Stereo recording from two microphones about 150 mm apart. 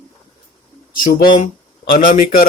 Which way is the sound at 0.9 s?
65° left (ahead or behind).